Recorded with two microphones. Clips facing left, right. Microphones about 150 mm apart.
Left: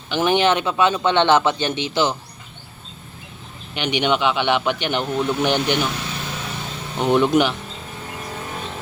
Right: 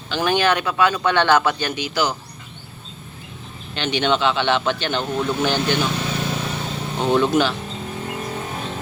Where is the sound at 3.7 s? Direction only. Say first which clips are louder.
Even; 15° left (ahead or behind).